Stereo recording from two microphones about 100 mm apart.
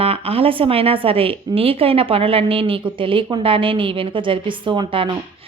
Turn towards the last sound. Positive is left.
turn(degrees=-55)  # may be behind; listen again after turning